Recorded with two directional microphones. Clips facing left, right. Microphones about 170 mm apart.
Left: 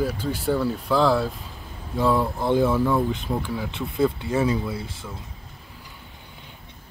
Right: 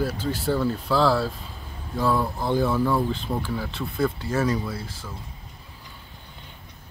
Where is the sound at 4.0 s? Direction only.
20° left (ahead or behind).